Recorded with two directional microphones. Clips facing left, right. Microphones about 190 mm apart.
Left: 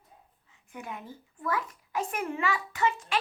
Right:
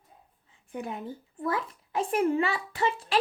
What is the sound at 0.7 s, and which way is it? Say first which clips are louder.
Speech: right 6 dB; 35° right (ahead or behind).